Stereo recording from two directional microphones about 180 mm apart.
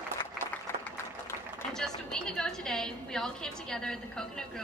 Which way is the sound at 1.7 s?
5° left (ahead or behind).